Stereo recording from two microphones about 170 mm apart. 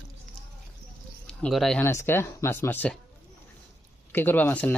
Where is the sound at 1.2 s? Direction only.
Centre (ahead or behind).